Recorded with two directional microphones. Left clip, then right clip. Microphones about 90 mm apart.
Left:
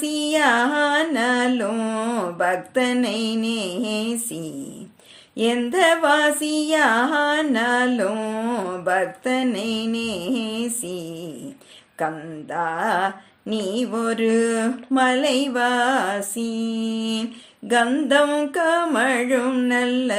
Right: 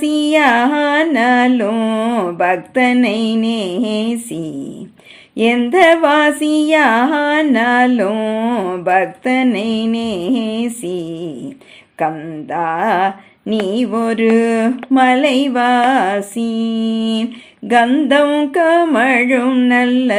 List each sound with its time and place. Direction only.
0.0 s music: 15° left (ahead or behind)
5.4 s music: 15° left (ahead or behind)